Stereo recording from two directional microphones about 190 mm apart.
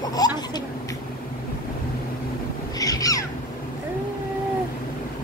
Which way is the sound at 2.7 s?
20° left (ahead or behind).